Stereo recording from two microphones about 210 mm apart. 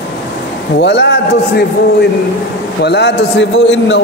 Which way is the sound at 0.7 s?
55° left (ahead or behind).